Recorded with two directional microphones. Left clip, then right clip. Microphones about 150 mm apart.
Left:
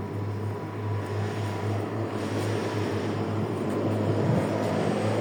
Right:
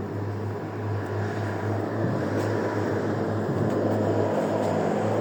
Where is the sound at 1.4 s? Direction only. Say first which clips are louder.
Right 3 dB; 30° left (ahead or behind).